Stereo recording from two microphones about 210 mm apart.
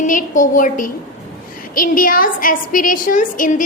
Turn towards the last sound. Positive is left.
turn(degrees=40)  # may be behind; listen again after turning